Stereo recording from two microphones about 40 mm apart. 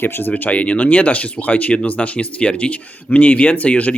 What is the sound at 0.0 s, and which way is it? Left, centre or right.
Speech, left.